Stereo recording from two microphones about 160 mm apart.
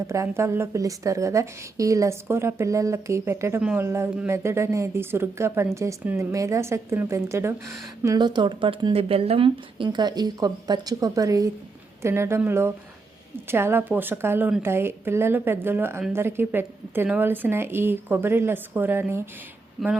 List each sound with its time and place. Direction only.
0.1 s a woman's voice: 15° right (ahead or behind)
3.6 s speech: 5° right (ahead or behind)
3.8 s a woman's voice: 15° right (ahead or behind)